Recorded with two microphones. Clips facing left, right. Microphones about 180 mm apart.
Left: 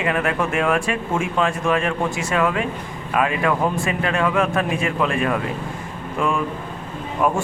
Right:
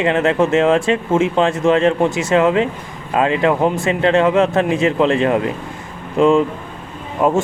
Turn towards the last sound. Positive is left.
turn(degrees=-20)  # may be behind; listen again after turning